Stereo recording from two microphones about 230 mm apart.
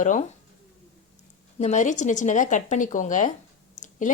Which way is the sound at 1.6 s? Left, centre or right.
Left.